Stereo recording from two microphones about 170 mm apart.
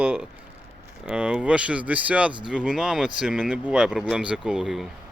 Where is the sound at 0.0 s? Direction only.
5° right (ahead or behind).